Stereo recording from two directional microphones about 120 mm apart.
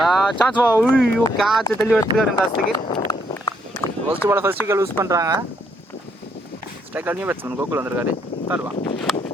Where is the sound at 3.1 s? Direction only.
35° left (ahead or behind).